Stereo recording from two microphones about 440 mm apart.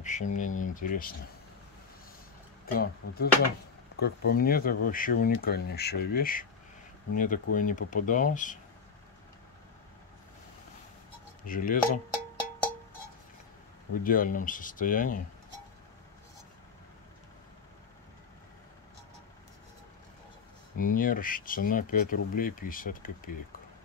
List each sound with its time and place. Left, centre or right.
0.0 s speech: centre
2.6 s speech: centre
11.4 s speech: centre
14.0 s speech: centre
20.7 s speech: centre